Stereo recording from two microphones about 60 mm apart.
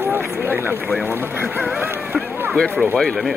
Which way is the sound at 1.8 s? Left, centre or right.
Right.